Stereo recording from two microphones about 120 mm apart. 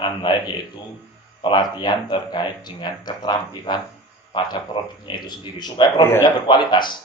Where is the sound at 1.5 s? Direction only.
40° left (ahead or behind).